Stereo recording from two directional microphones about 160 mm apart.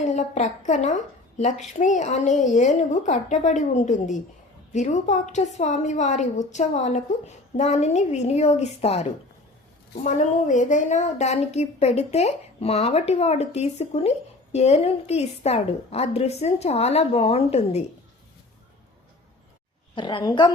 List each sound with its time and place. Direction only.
0.0 s a woman's voice: 50° left (ahead or behind)
10.0 s a woman's voice: 50° left (ahead or behind)
20.0 s a woman's voice: 30° left (ahead or behind)